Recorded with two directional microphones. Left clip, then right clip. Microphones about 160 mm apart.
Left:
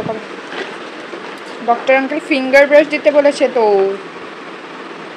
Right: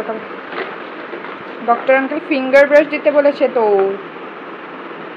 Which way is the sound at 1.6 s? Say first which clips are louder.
Left 1 dB; 30° left (ahead or behind).